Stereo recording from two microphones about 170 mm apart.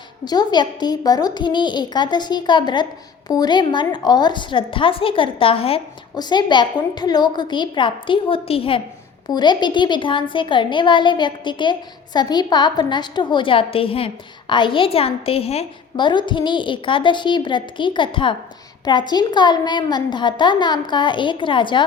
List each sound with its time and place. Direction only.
0.3 s a woman's voice: 25° left (ahead or behind)